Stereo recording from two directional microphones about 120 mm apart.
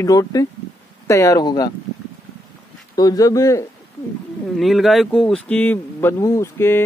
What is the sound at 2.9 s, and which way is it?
Speech, 35° left (ahead or behind).